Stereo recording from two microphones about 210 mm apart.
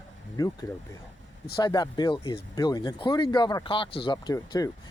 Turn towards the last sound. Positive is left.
turn(degrees=20)  # may be behind; listen again after turning